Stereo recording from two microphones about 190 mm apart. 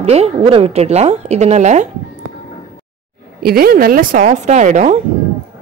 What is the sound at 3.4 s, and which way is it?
A woman's voice, 50° right (ahead or behind).